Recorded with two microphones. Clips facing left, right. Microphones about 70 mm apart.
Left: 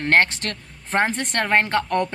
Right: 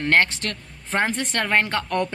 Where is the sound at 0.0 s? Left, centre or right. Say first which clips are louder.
Left 1 dB; left.